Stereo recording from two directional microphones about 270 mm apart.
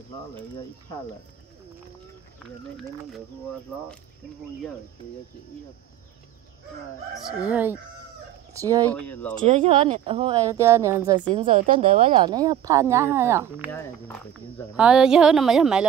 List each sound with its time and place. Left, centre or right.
7.2 s speech: centre
8.9 s speech: centre
9.5 s speech: right
11.3 s a woman's voice: right; by 13.7 s centre
13.7 s speech: centre
14.8 s speech: centre